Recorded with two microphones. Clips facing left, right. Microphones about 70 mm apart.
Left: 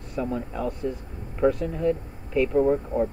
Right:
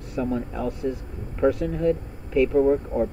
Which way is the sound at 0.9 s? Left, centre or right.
Centre.